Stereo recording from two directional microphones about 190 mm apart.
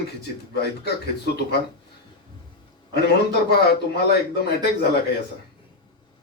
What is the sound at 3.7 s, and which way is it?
Speech, 60° left (ahead or behind).